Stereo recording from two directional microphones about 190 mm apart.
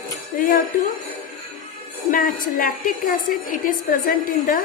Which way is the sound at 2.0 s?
45° left (ahead or behind).